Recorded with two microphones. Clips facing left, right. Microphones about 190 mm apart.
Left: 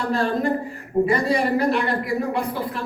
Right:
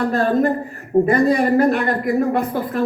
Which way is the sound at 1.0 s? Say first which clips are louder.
Right 4 dB; 55° right (ahead or behind).